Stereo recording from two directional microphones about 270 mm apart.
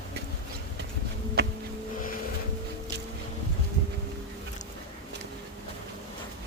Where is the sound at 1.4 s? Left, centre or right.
Right.